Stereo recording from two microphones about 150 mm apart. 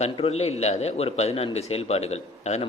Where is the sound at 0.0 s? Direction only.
45° left (ahead or behind).